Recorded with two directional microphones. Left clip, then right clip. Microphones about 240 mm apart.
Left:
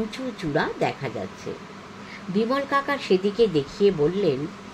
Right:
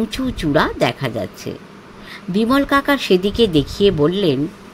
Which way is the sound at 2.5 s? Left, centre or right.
Right.